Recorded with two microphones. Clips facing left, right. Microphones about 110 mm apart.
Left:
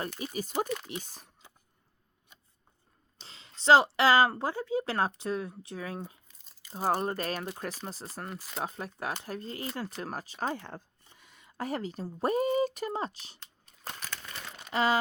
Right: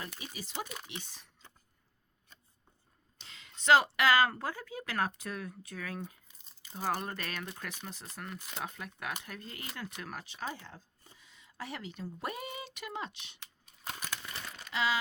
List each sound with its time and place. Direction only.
0.2 s speech: 45° left (ahead or behind)
3.2 s speech: 30° left (ahead or behind)
6.7 s speech: 35° left (ahead or behind)
10.6 s speech: 55° left (ahead or behind); by 13.4 s 40° left (ahead or behind)
14.7 s a sound: 45° left (ahead or behind)